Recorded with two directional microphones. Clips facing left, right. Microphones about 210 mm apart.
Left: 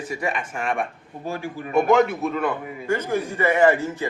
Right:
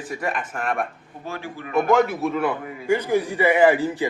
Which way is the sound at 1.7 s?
Centre (ahead or behind).